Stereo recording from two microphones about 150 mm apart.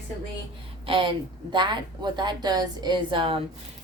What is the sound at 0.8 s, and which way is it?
A woman's voice, 35° right (ahead or behind).